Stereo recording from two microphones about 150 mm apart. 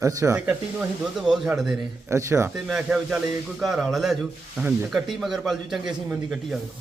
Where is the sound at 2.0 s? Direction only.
20° right (ahead or behind).